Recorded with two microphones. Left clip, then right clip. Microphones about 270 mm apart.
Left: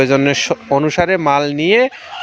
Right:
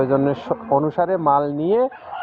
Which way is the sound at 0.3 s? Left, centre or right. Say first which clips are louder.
Left 5 dB; left.